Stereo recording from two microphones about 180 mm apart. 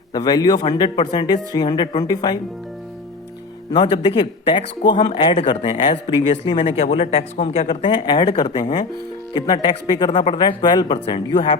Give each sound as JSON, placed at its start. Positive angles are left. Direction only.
{"t": 0.1, "sound": "speech", "side_deg": 20}
{"t": 3.7, "sound": "speech", "side_deg": 25}